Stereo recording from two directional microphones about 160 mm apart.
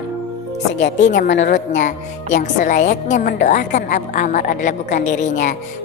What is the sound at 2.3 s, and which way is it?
A woman's voice, 50° left (ahead or behind).